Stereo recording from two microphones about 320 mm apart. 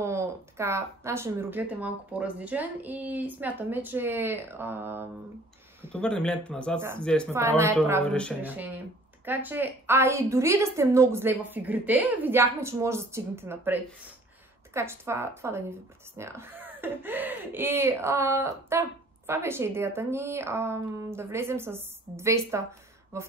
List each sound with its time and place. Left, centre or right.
0.0 s speech: centre
7.3 s speech: centre
8.0 s speech: centre